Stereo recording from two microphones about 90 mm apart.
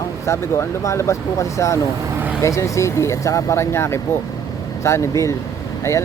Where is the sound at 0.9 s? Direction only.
30° left (ahead or behind).